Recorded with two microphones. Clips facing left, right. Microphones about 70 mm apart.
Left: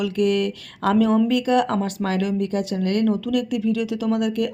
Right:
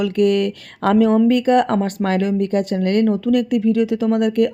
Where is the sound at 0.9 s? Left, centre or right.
Right.